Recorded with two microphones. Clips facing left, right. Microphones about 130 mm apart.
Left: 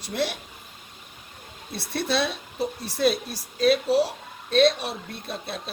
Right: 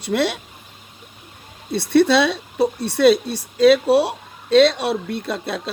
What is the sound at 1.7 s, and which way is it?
Speech, 70° right (ahead or behind).